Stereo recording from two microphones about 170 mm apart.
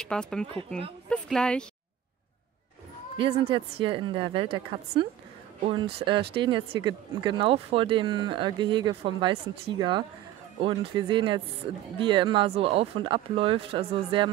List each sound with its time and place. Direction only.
0.0 s speech: 5° left (ahead or behind)
3.2 s speech: 30° right (ahead or behind)